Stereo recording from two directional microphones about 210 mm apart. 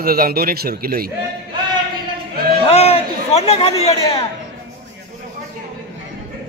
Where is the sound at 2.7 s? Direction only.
30° left (ahead or behind).